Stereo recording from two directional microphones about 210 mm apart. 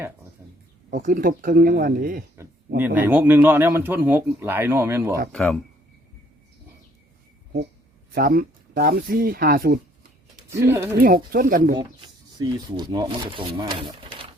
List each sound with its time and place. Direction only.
0.9 s speech: 40° right (ahead or behind)
2.7 s a man's voice: 10° right (ahead or behind)
5.3 s speech: centre (ahead or behind)
8.1 s speech: 45° right (ahead or behind)
10.5 s a man's voice: 10° right (ahead or behind)
11.0 s speech: 45° right (ahead or behind)
11.8 s speech: 20° right (ahead or behind)